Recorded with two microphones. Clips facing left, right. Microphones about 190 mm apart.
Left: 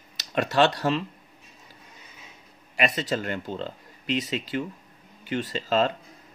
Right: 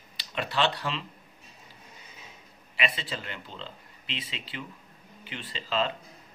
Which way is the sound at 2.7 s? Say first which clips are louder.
Left 7 dB; 45° left (ahead or behind).